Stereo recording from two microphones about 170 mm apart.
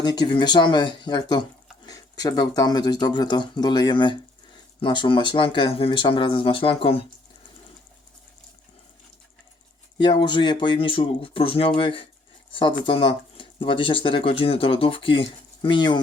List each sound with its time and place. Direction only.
0.0 s speech: 25° left (ahead or behind)
10.0 s speech: 25° left (ahead or behind)